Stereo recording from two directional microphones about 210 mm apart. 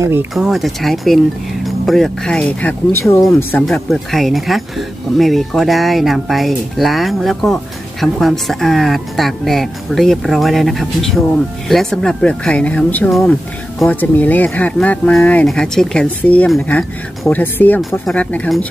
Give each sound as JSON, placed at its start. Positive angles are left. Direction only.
{"t": 0.0, "sound": "speech", "side_deg": -10}
{"t": 0.3, "sound": "speech", "side_deg": 0}